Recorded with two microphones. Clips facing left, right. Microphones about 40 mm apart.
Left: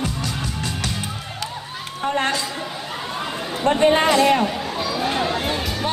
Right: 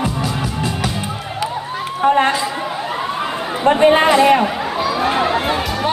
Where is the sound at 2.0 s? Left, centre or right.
Centre.